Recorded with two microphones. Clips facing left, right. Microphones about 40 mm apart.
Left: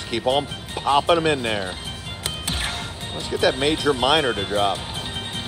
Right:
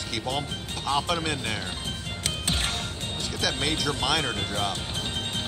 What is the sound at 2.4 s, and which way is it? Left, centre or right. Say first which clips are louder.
Music: left 1 dB; centre.